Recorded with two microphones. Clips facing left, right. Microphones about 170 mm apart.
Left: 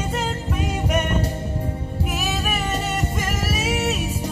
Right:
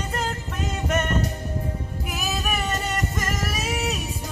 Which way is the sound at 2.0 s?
Centre (ahead or behind).